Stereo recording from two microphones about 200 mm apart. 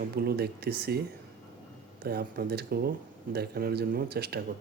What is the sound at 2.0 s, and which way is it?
Speech, 50° right (ahead or behind).